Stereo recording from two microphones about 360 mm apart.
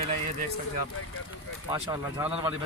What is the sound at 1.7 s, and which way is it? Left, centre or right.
Speech, centre.